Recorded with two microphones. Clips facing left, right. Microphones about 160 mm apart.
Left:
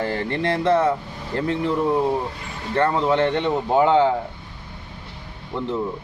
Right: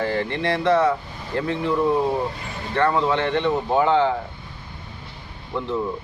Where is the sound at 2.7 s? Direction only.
35° left (ahead or behind).